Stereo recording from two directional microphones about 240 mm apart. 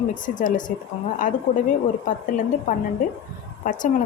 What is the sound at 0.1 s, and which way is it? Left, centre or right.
Speech, left.